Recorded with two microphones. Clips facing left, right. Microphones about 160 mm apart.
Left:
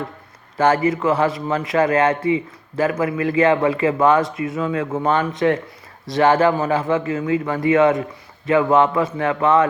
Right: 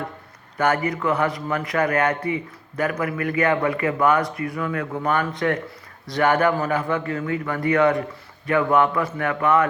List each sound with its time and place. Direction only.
0.5 s a man's voice: 25° left (ahead or behind)